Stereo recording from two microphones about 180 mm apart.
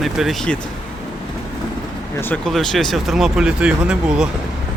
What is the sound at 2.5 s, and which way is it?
Speech, centre (ahead or behind).